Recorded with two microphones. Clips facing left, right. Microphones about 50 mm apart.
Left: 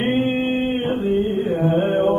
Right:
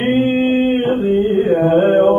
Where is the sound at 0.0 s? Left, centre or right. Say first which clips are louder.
Right 5 dB; centre.